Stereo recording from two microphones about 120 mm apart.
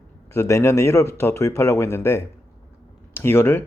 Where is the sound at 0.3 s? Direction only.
25° left (ahead or behind).